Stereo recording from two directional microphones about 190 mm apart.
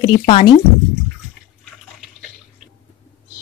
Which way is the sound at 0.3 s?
25° left (ahead or behind).